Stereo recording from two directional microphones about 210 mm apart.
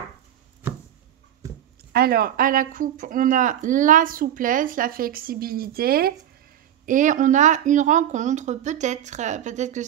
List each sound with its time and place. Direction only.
1.9 s speech: 45° right (ahead or behind)